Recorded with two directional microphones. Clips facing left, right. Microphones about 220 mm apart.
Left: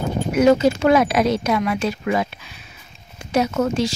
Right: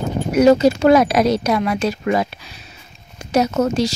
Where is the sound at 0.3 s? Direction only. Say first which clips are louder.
Right 3 dB; 40° right (ahead or behind).